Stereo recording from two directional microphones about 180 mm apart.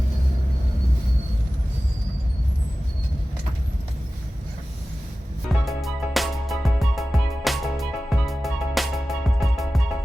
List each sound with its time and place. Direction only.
5.6 s music: centre (ahead or behind)